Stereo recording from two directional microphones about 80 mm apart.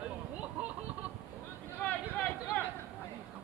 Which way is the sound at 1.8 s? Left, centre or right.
Centre.